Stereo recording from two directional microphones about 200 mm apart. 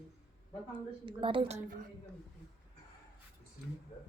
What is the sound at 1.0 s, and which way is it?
Speech, 25° right (ahead or behind).